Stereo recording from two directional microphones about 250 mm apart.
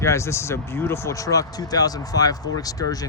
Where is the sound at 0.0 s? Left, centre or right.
Centre.